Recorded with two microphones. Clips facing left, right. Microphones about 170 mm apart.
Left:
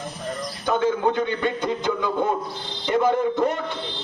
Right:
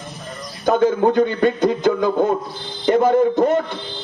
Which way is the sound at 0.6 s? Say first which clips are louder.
Right 6 dB; 40° right (ahead or behind).